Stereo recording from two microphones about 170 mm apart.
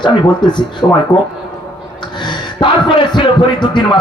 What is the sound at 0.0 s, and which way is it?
A man's voice, 25° left (ahead or behind).